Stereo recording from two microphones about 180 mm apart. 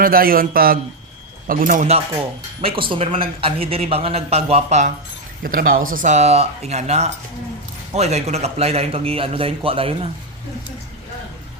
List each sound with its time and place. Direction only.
0.0 s a man's voice: 55° right (ahead or behind)
2.6 s a man's voice: 30° right (ahead or behind)
5.4 s a man's voice: 50° right (ahead or behind); by 10.1 s 30° right (ahead or behind)